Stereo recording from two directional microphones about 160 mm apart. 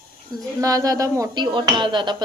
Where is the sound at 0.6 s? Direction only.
20° right (ahead or behind).